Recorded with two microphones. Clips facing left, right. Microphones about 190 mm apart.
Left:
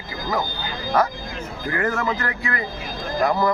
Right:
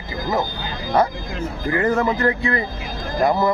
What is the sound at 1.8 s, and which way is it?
Speech, 25° right (ahead or behind).